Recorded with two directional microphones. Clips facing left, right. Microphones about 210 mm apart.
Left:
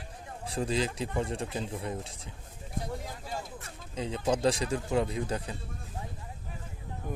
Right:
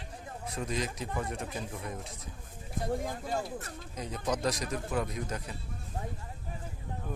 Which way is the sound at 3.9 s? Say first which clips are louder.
Left 4 dB; 30° left (ahead or behind).